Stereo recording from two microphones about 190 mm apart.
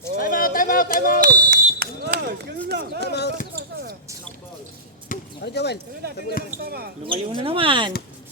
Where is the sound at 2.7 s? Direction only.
60° right (ahead or behind).